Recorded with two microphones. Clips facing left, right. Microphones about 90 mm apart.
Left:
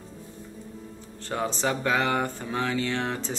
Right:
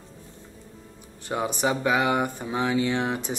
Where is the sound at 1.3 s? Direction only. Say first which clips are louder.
Right 2 dB; 15° right (ahead or behind).